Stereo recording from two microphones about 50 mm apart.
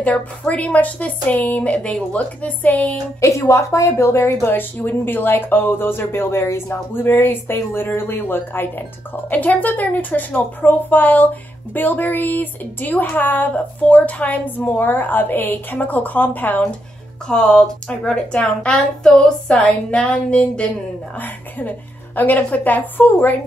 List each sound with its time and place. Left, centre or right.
0.0 s speech: left
3.2 s a woman's voice: left
4.5 s speech: left
9.3 s a woman's voice: left
17.3 s speech: centre
18.7 s speech: centre
21.2 s a woman's voice: left